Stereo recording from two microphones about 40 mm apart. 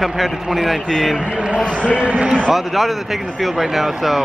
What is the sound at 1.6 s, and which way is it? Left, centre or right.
Speech, left.